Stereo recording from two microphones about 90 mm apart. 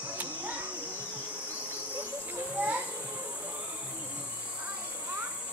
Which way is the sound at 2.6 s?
20° right (ahead or behind).